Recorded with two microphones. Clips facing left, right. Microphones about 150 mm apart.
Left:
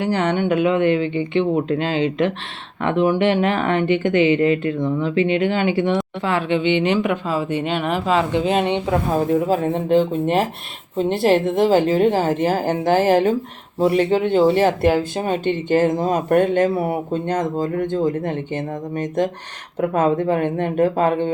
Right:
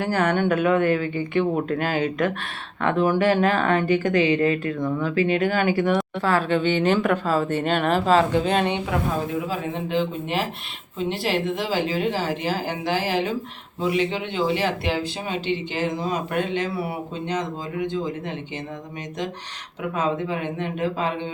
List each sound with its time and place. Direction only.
0.0 s speech: 20° left (ahead or behind)
9.3 s speech: 40° left (ahead or behind)